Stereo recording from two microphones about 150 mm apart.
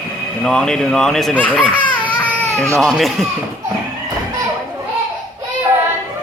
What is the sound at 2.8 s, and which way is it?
Speech, centre (ahead or behind).